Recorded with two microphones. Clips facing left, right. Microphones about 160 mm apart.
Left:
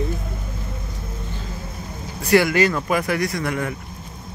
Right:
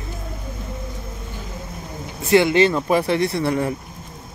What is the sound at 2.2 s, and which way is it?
Speech, 25° right (ahead or behind).